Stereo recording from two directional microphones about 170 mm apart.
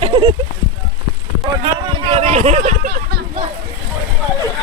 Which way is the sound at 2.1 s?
35° right (ahead or behind).